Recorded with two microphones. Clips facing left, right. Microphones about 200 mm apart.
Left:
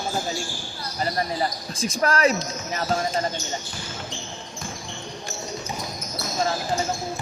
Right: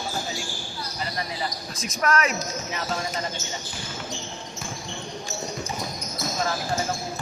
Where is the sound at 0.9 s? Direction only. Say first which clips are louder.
Left 7 dB; 40° left (ahead or behind).